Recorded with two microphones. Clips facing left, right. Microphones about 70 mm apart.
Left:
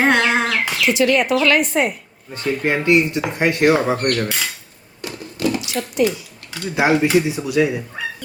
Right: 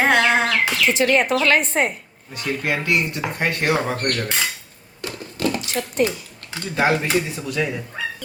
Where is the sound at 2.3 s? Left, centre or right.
Left.